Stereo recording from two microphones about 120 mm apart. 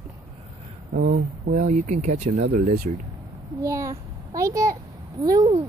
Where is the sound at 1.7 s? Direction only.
90° right; by 2.8 s 70° right (ahead or behind).